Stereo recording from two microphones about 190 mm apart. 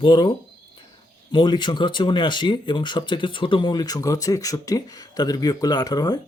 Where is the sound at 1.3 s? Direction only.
25° left (ahead or behind).